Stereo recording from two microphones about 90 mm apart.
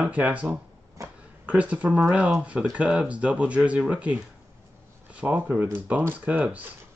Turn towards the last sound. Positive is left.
turn(degrees=-20)  # may be behind; listen again after turning